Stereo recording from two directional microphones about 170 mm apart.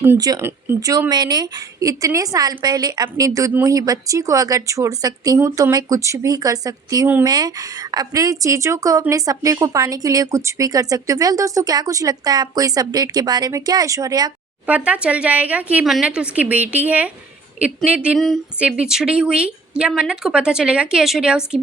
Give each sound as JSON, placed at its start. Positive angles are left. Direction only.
{"t": 0.0, "sound": "speech", "side_deg": -15}
{"t": 14.7, "sound": "a woman's voice", "side_deg": -5}